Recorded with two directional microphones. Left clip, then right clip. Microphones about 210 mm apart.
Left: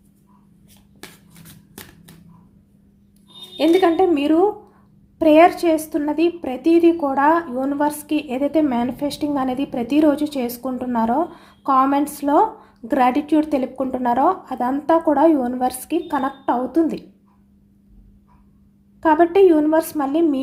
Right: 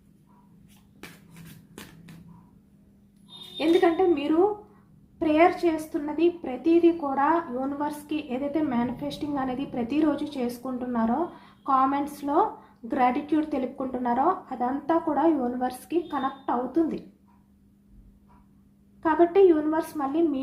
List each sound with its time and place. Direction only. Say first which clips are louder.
3.6 s a woman's voice: left 6 dB; 55° left (ahead or behind)
19.0 s a woman's voice: left 6 dB; 55° left (ahead or behind)